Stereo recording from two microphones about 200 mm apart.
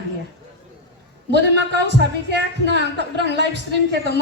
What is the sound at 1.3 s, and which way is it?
A man's voice, 60° right (ahead or behind).